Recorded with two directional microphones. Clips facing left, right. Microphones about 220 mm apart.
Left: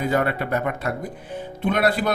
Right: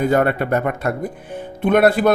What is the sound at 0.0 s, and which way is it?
A man's voice, 50° right (ahead or behind).